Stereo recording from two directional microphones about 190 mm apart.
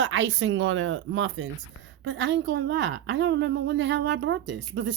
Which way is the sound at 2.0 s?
75° right (ahead or behind).